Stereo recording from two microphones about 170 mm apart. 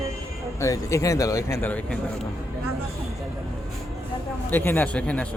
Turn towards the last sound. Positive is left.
turn(degrees=10)  # may be behind; listen again after turning